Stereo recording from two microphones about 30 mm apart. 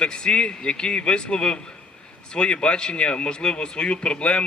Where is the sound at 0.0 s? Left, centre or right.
Left.